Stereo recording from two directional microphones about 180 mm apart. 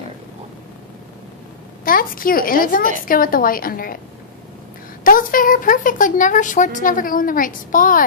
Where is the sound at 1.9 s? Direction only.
50° left (ahead or behind).